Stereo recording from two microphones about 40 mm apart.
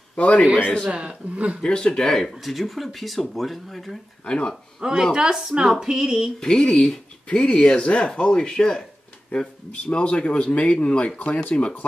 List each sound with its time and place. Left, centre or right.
0.1 s a man's voice: left
0.8 s a man's voice: right
1.3 s speech: right
1.6 s speech: left
2.4 s speech: centre
4.2 s speech: left
4.7 s a woman's voice: centre
6.4 s speech: centre; by 11.5 s left